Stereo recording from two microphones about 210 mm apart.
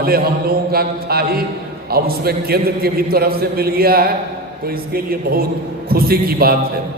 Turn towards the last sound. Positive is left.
turn(degrees=-45)  # may be behind; listen again after turning